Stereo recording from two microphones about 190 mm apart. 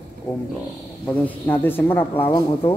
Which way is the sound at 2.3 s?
20° left (ahead or behind).